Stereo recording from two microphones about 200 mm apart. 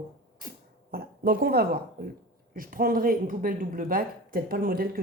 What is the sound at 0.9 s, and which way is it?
A woman's voice, 50° right (ahead or behind).